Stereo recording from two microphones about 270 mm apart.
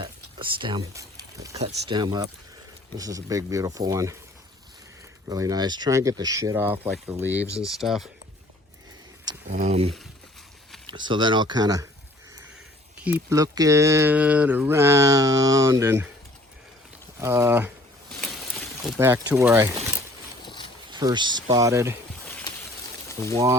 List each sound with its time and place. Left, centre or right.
0.0 s a sound: centre
1.5 s speech: centre
5.3 s speech: centre
9.5 s speech: right
10.9 s speech: centre
13.1 s speech: centre
17.2 s speech: centre
18.5 s a sound: centre
19.3 s speech: centre
20.4 s boat: centre
20.9 s speech: centre